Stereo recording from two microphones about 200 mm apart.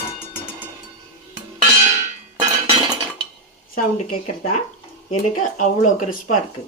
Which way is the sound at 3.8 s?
40° left (ahead or behind).